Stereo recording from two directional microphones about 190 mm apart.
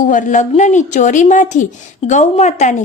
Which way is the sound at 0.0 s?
45° left (ahead or behind).